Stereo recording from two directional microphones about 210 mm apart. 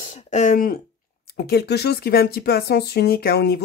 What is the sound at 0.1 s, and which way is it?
Speech, 35° left (ahead or behind).